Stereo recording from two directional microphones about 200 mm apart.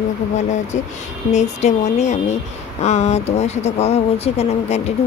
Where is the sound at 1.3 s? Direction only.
35° left (ahead or behind).